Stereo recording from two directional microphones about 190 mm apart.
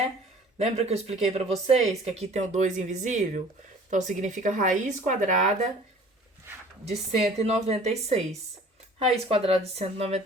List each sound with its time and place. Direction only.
0.6 s speech: 35° right (ahead or behind)
6.8 s speech: 35° right (ahead or behind)